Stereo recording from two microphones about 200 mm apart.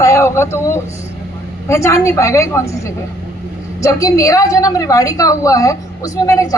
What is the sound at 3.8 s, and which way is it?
A woman's voice, 15° left (ahead or behind).